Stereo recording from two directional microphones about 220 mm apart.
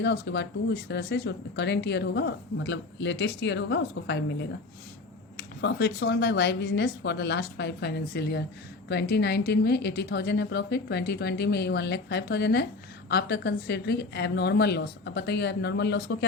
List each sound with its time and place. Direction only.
0.0 s speech: 50° left (ahead or behind)